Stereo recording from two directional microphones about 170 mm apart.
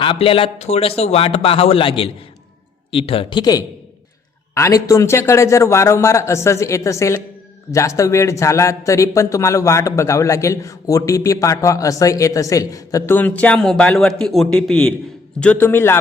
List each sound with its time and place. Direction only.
0.0 s a man's voice: 30° left (ahead or behind); by 16.0 s 15° left (ahead or behind)